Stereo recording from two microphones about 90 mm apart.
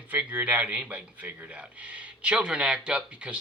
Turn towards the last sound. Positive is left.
turn(degrees=-10)  # may be behind; listen again after turning